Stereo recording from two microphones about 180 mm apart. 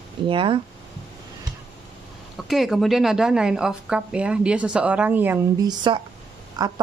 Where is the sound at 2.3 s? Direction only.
Centre (ahead or behind).